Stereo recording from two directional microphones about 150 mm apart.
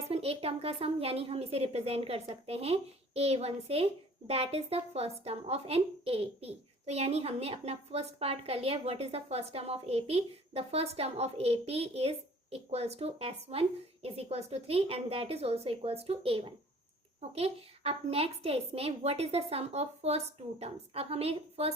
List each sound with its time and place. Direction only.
0.1 s a woman's voice: 40° right (ahead or behind)